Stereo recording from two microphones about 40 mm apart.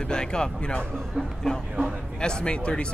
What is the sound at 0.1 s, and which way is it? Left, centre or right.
Speech, left.